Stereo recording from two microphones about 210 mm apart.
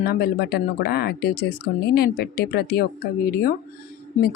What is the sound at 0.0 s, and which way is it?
Speech, 45° left (ahead or behind).